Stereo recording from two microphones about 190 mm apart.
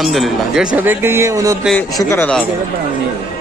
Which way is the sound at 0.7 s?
10° right (ahead or behind).